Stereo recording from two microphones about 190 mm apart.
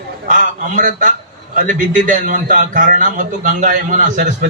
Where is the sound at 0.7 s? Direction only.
45° right (ahead or behind).